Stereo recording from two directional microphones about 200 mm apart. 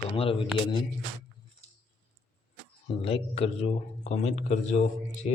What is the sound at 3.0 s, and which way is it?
Speech, 30° left (ahead or behind).